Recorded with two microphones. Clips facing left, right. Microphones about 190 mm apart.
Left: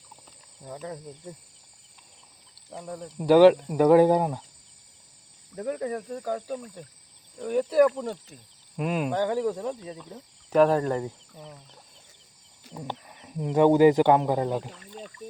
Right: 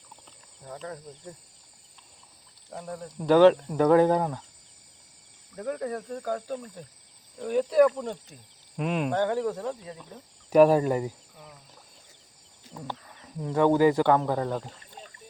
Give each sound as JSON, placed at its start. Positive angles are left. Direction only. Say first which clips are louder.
{"t": 0.6, "sound": "speech", "louder": "left 2 dB", "side_deg": 15}
{"t": 2.6, "sound": "speech", "louder": "even", "side_deg": 5}
{"t": 5.5, "sound": "speech", "louder": "left 2 dB", "side_deg": 15}
{"t": 10.5, "sound": "speech", "louder": "right 2 dB", "side_deg": -10}
{"t": 12.7, "sound": "speech", "louder": "left 2 dB", "side_deg": 15}